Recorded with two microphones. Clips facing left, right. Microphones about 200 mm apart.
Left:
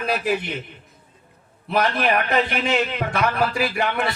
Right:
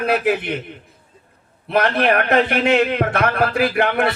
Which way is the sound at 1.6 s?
60° right (ahead or behind).